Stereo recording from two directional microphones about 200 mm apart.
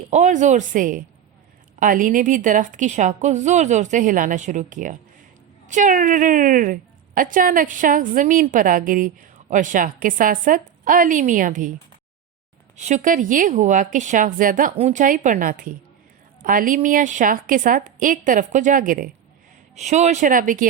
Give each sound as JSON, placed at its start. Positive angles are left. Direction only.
{"t": 0.1, "sound": "a woman's voice", "side_deg": -40}
{"t": 12.7, "sound": "a woman's voice", "side_deg": -35}